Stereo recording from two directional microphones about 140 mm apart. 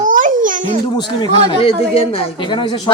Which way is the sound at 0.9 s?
30° left (ahead or behind).